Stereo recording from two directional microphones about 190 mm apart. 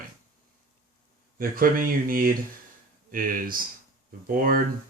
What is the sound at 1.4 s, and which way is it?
Speech, 50° right (ahead or behind).